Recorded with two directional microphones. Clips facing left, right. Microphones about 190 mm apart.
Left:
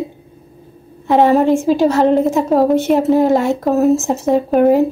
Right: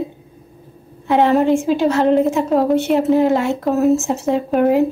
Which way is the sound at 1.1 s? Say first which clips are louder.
Left 2 dB; 40° left (ahead or behind).